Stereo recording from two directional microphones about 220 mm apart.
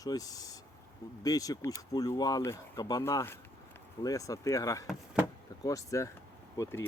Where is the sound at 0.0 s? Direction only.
15° left (ahead or behind).